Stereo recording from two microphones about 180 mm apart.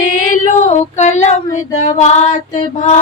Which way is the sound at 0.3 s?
45° left (ahead or behind).